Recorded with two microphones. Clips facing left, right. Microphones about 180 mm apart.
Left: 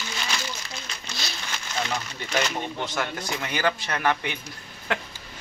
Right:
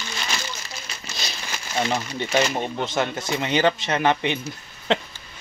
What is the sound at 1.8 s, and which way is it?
Speech, 25° right (ahead or behind).